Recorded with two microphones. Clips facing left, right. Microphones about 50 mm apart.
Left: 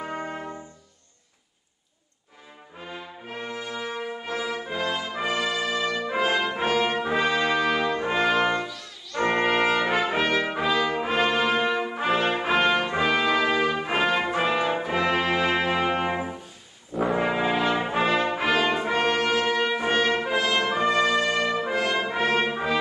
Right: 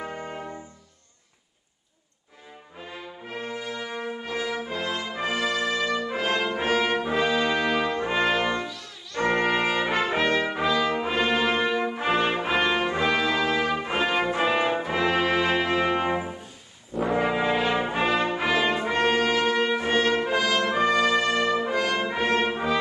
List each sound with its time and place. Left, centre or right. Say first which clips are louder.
0.0 s trumpet: left 2 dB; left
2.9 s brass instrument: even; centre
8.4 s brass instrument: left 2 dB; centre
9.5 s brass instrument: left 2 dB; centre
14.0 s brass instrument: right 1 dB; centre